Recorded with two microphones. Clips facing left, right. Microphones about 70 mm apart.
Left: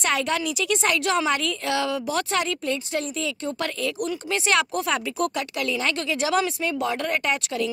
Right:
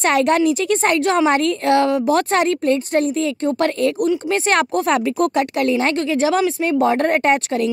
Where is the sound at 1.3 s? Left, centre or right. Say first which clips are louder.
Right 9 dB; right.